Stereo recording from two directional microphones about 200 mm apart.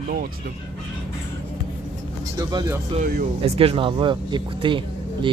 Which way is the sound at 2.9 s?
45° right (ahead or behind).